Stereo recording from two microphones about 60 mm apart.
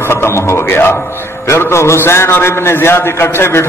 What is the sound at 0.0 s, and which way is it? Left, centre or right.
A man's voice, left.